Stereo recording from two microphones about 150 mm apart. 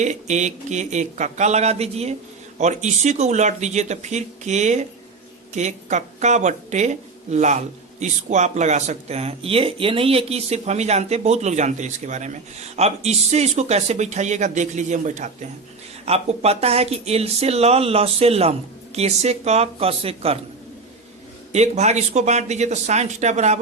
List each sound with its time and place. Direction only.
0.0 s speech: 50° right (ahead or behind)
16.0 s speech: 45° right (ahead or behind)
21.5 s speech: 50° right (ahead or behind)